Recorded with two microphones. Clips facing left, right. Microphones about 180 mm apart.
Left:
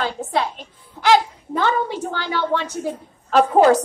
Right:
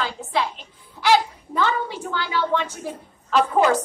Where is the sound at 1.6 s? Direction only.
45° left (ahead or behind).